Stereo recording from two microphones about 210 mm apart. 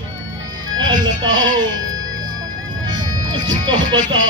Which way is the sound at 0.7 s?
70° right (ahead or behind).